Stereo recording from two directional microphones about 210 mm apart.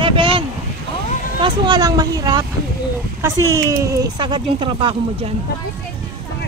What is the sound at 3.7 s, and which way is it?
Speech, 15° right (ahead or behind).